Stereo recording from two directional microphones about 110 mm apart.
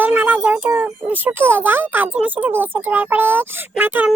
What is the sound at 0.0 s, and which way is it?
Speech, 15° right (ahead or behind).